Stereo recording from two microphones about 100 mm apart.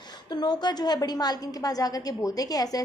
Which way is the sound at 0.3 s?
45° left (ahead or behind).